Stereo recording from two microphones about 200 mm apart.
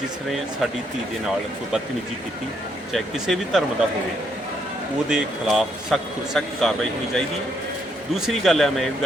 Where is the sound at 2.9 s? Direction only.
Centre (ahead or behind).